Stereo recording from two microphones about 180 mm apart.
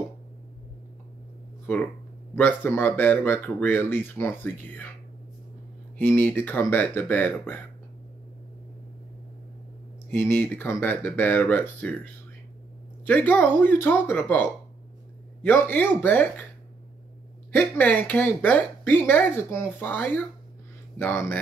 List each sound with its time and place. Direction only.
2.3 s speech: 10° left (ahead or behind)
5.9 s speech: 10° left (ahead or behind)
10.1 s speech: 10° left (ahead or behind)
17.5 s speech: 10° left (ahead or behind)